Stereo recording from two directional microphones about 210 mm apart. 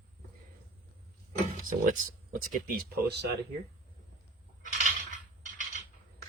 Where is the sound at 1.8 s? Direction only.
40° right (ahead or behind).